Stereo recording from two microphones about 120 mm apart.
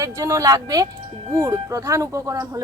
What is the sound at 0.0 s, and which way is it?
A woman's voice, 25° right (ahead or behind).